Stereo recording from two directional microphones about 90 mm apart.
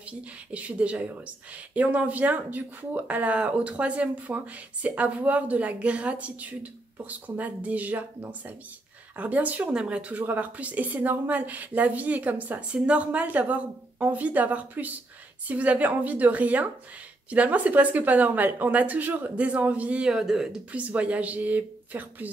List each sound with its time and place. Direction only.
0.5 s speech: 15° right (ahead or behind)